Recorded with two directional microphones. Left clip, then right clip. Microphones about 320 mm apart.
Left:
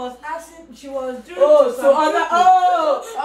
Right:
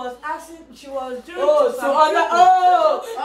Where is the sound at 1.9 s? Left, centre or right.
Centre.